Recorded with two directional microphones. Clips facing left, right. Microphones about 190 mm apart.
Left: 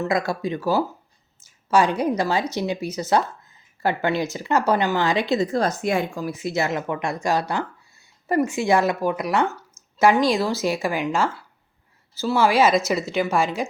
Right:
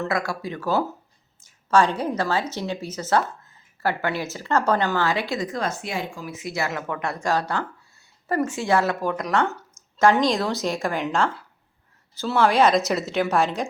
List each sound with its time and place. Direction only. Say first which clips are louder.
0.0 s a woman's voice: left 3 dB; 20° left (ahead or behind); by 6.2 s 50° left (ahead or behind)
6.2 s a woman's voice: left 4 dB; 30° left (ahead or behind); by 13.7 s centre (ahead or behind)